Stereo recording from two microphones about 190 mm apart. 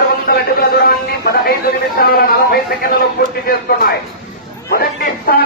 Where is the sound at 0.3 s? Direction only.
50° left (ahead or behind).